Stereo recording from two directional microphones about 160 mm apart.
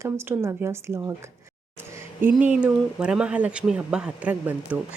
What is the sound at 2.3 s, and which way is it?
Speech, 5° right (ahead or behind).